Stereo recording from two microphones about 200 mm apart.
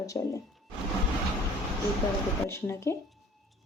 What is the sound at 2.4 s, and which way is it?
Speech, 15° left (ahead or behind).